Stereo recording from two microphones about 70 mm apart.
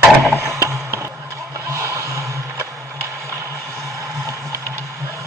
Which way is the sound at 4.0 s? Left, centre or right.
Right.